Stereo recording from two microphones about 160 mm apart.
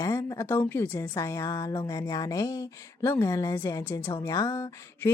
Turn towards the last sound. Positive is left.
turn(degrees=15)  # may be behind; listen again after turning